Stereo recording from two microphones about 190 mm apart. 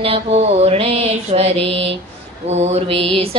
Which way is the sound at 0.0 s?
30° right (ahead or behind).